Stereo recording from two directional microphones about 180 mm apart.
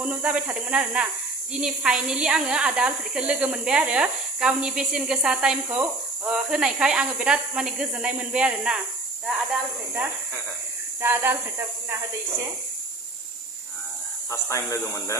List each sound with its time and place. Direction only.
0.0 s speech: 5° right (ahead or behind)
11.0 s speech: 10° right (ahead or behind)
14.3 s speech: 15° left (ahead or behind)